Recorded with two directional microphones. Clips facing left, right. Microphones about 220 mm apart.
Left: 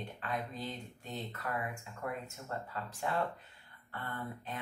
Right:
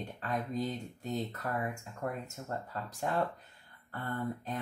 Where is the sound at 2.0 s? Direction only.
40° right (ahead or behind).